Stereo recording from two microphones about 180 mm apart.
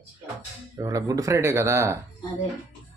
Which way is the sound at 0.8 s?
20° right (ahead or behind).